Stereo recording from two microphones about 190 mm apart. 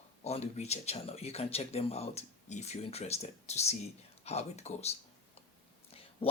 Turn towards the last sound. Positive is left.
turn(degrees=30)  # may be behind; listen again after turning